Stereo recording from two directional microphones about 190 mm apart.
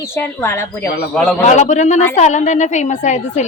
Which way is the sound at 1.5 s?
40° left (ahead or behind).